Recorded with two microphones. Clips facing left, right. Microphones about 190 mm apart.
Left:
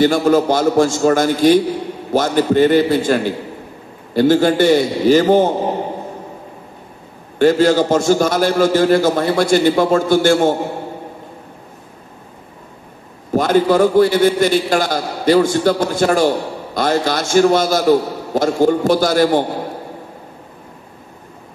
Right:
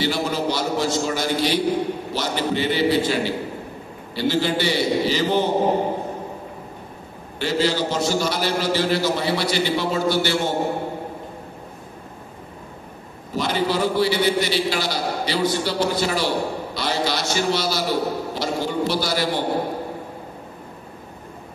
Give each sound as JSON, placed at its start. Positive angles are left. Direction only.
{"t": 0.0, "sound": "a man's voice", "side_deg": 50}
{"t": 7.3, "sound": "a man's voice", "side_deg": 50}
{"t": 13.3, "sound": "a man's voice", "side_deg": 50}